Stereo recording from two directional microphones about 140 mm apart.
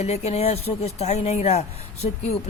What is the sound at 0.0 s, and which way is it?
Speech, 50° left (ahead or behind).